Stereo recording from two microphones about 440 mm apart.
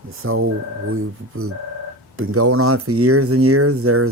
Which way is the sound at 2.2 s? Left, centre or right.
Right.